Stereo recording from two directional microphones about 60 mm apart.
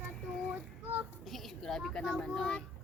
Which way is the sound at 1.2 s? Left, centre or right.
Centre.